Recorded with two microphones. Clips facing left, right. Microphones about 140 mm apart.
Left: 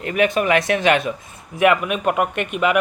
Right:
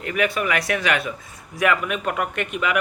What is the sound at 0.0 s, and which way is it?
A man's voice, 25° left (ahead or behind).